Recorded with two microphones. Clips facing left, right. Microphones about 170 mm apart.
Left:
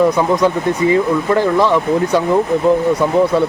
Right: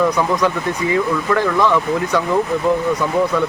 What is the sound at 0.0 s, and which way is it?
Speech, 25° left (ahead or behind).